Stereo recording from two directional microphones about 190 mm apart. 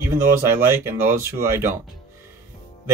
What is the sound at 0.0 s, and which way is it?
Speech, 15° right (ahead or behind).